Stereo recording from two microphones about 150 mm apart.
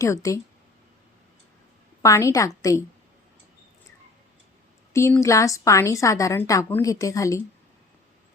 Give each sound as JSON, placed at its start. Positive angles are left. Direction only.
{"t": 0.0, "sound": "a woman's voice", "side_deg": 20}
{"t": 2.0, "sound": "a woman's voice", "side_deg": 20}
{"t": 4.9, "sound": "a woman's voice", "side_deg": 20}